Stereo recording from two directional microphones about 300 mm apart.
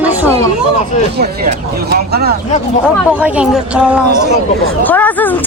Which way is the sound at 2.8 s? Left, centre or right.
Centre.